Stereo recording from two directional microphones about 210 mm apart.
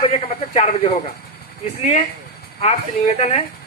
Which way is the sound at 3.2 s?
30° left (ahead or behind).